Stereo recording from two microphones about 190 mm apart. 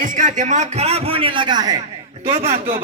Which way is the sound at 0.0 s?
45° right (ahead or behind).